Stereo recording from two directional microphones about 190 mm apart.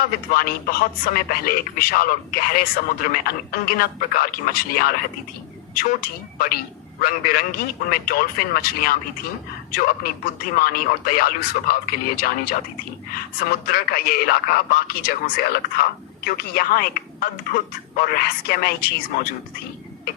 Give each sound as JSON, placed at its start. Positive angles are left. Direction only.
{"t": 0.3, "sound": "speech", "side_deg": 50}